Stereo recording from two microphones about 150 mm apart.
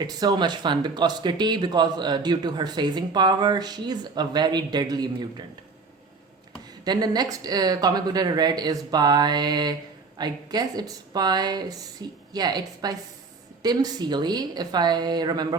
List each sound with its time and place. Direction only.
0.0 s speech: 25° right (ahead or behind)
6.8 s speech: 25° right (ahead or behind)